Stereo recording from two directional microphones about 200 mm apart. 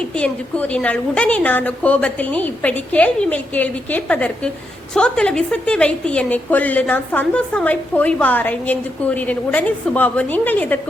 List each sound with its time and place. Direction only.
0.0 s a woman's voice: 5° left (ahead or behind)